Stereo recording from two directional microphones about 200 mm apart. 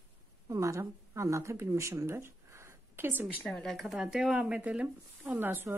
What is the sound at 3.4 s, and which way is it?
Speech, centre (ahead or behind).